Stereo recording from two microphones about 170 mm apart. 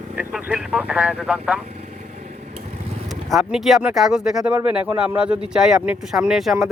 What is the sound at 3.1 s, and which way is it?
Speech, centre (ahead or behind).